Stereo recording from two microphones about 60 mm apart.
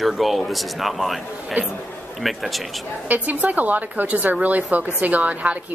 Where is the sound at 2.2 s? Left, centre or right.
Centre.